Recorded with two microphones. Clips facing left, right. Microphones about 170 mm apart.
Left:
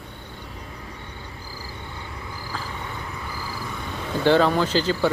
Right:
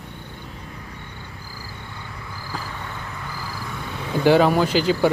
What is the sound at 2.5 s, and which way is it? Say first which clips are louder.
Vehicle: right 2 dB; 10° right (ahead or behind).